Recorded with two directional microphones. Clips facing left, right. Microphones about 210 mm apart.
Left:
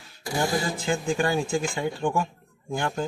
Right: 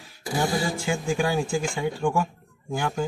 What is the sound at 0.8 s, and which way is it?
Speech, centre (ahead or behind).